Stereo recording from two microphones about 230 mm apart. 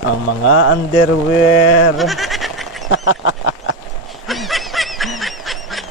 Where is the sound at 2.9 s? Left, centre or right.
Left.